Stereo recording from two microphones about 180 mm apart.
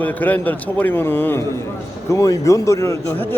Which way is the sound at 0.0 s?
10° left (ahead or behind).